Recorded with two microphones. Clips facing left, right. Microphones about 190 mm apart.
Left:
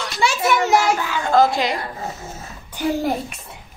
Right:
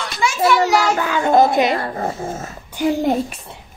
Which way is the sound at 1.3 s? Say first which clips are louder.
Right 2 dB; 20° right (ahead or behind).